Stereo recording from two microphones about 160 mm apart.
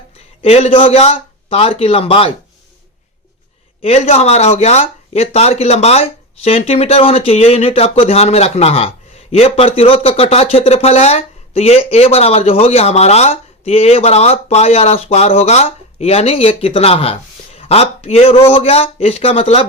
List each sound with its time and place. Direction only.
0.4 s speech: 40° left (ahead or behind)
3.8 s speech: 40° left (ahead or behind)